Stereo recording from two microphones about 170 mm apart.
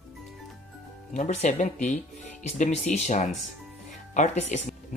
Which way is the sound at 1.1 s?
45° left (ahead or behind).